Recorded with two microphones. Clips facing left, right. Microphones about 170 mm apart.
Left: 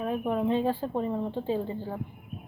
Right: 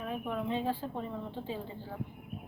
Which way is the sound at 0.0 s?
50° left (ahead or behind).